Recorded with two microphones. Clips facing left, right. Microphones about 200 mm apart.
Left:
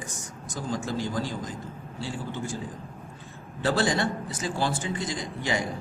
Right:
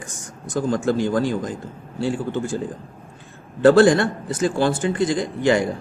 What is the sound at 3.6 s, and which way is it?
A man's voice, 55° right (ahead or behind).